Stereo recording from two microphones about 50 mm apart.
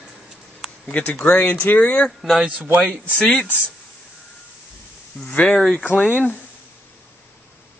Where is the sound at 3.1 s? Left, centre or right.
Centre.